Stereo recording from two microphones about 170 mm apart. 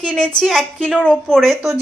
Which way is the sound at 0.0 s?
5° left (ahead or behind).